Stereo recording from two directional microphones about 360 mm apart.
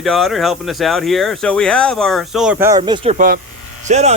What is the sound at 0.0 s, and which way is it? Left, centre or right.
Speech, centre.